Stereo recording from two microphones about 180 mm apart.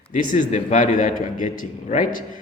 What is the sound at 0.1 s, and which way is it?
A man's voice, 45° left (ahead or behind).